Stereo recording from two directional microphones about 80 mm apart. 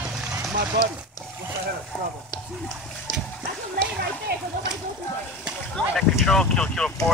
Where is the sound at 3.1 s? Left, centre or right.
Left.